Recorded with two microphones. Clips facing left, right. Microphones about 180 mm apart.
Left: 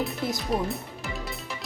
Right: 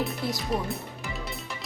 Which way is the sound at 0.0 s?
Centre (ahead or behind).